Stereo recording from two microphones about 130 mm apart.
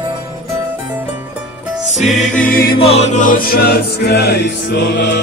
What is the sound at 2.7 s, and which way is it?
Choir, 50° left (ahead or behind).